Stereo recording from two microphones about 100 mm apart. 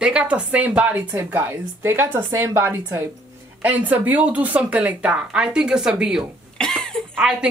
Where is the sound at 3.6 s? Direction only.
15° right (ahead or behind).